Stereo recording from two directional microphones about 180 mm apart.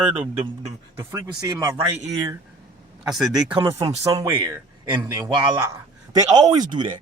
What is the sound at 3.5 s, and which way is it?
A man's voice, 15° right (ahead or behind).